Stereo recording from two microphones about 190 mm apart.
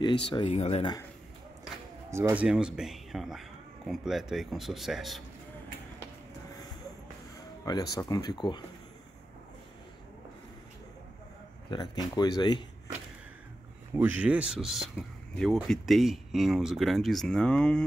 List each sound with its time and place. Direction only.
0.3 s speech: 30° left (ahead or behind)
2.0 s speech: 15° right (ahead or behind)
7.9 s speech: 20° left (ahead or behind)
11.7 s speech: 20° left (ahead or behind)
13.9 s speech: 10° right (ahead or behind)